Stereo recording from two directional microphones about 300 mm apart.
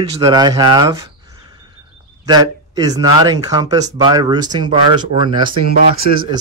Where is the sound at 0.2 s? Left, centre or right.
Centre.